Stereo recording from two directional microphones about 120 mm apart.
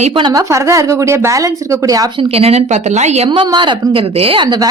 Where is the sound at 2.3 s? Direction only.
60° right (ahead or behind).